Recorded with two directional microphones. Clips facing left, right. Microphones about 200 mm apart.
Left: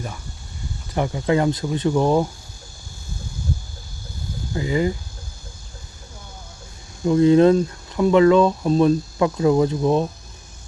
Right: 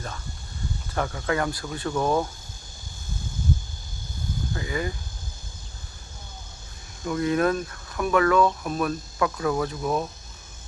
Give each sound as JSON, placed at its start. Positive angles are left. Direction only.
{"t": 0.9, "sound": "speech", "side_deg": 20}
{"t": 4.5, "sound": "speech", "side_deg": 20}
{"t": 7.0, "sound": "speech", "side_deg": 25}